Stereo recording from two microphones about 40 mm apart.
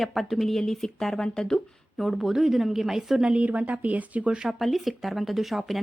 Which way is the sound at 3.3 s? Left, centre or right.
Right.